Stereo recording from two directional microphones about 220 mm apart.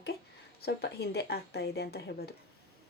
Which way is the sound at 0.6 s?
45° left (ahead or behind).